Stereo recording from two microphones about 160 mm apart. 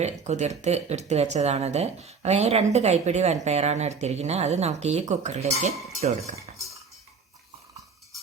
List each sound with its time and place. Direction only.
0.0 s speech: 45° right (ahead or behind)